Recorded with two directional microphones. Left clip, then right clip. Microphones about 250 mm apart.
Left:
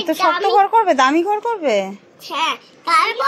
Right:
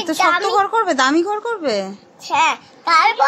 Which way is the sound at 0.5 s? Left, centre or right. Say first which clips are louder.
Left 3 dB; centre.